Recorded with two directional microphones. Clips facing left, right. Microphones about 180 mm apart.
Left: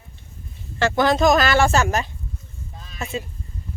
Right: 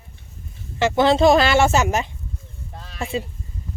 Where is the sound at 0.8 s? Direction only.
20° right (ahead or behind).